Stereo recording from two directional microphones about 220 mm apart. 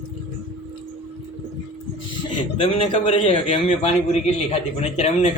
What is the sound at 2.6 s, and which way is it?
A man's voice, 25° left (ahead or behind).